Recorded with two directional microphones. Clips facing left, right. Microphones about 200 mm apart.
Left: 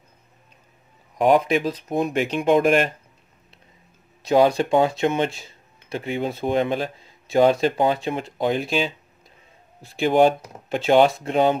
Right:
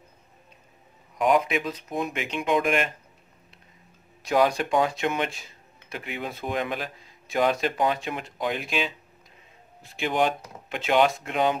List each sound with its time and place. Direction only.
1.1 s speech: 35° left (ahead or behind)
4.2 s speech: 25° left (ahead or behind)
9.9 s speech: 35° left (ahead or behind)